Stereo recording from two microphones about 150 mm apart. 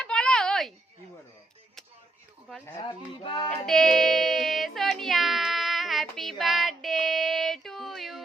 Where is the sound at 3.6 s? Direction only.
5° left (ahead or behind).